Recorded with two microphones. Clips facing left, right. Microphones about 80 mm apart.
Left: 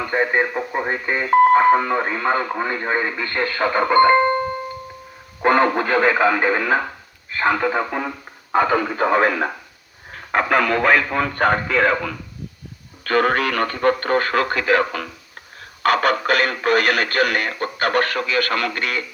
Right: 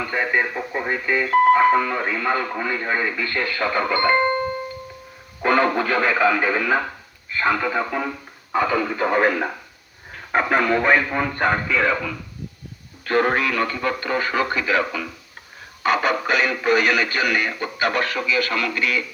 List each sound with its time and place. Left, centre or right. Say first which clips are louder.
0.1 s speech: left 4 dB; left
5.4 s speech: left 2 dB; left
8.5 s speech: left 3 dB; left
10.1 s speech: left 1 dB; left
11.7 s speech: left 2 dB; left
13.1 s speech: left 1 dB; left